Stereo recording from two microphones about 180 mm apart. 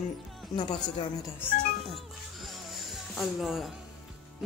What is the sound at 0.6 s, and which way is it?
Speech, 25° left (ahead or behind).